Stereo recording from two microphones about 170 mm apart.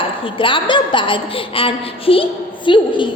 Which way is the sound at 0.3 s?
30° left (ahead or behind).